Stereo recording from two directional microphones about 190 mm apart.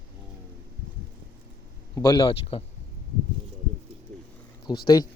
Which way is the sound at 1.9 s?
20° left (ahead or behind).